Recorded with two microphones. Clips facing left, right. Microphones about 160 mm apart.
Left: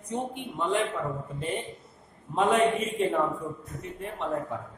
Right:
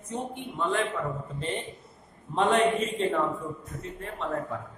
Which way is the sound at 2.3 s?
10° left (ahead or behind).